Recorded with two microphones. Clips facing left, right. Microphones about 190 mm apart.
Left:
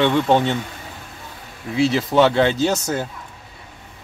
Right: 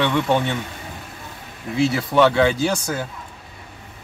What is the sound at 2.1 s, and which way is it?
Speech, 25° left (ahead or behind).